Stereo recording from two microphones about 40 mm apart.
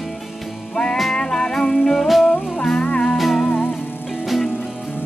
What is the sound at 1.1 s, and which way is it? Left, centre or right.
Music, centre.